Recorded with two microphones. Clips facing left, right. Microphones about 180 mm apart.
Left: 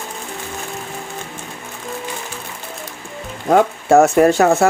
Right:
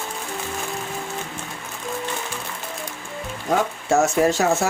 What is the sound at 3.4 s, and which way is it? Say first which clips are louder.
Speech: left 8 dB; 55° left (ahead or behind).